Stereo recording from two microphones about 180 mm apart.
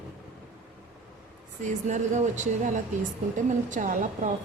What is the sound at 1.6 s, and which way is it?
A woman's voice, 40° right (ahead or behind).